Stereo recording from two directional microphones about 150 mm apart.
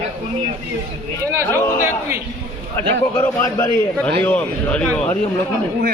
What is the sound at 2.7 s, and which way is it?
A man's voice, 20° left (ahead or behind).